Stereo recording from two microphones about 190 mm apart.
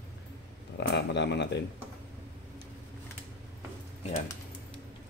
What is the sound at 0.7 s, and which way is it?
Speech, 65° left (ahead or behind).